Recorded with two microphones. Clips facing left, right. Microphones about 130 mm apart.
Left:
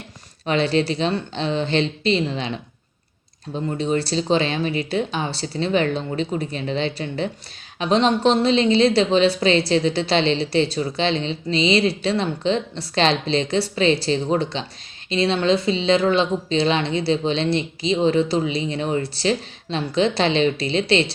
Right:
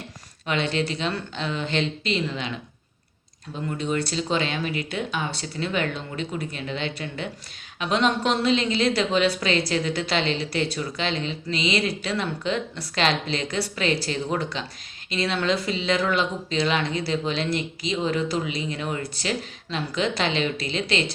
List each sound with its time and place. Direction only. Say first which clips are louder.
0.4 s speech: left 6 dB; 35° left (ahead or behind)
3.7 s a woman's voice: left 4 dB; 30° left (ahead or behind)